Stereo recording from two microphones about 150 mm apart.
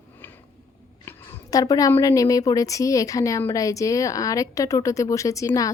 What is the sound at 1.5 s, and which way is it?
A woman's voice, 25° left (ahead or behind).